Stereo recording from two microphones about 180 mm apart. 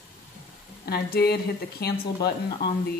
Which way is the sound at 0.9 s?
60° left (ahead or behind).